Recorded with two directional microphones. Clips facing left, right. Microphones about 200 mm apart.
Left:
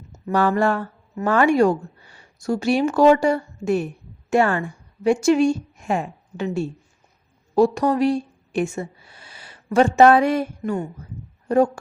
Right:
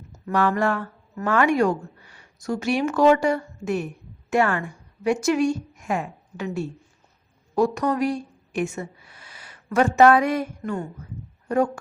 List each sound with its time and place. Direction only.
0.1 s a woman's voice: 30° left (ahead or behind)